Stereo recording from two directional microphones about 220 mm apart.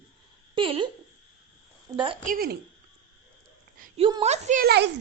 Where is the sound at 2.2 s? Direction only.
40° right (ahead or behind).